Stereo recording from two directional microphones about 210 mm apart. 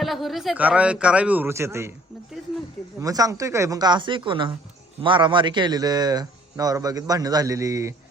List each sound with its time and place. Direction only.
0.0 s speech: centre (ahead or behind)
3.0 s speech: 15° right (ahead or behind)